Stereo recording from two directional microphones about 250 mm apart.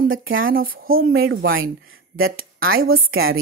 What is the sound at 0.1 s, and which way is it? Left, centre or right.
A woman's voice, right.